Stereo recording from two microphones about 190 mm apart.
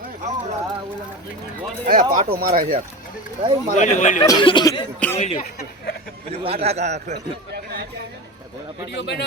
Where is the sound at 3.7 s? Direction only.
40° left (ahead or behind).